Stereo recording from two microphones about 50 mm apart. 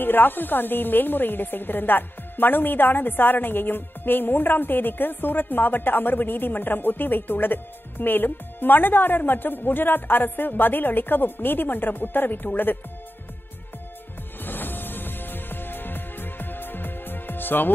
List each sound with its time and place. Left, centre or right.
0.0 s speech: left
14.4 s music: left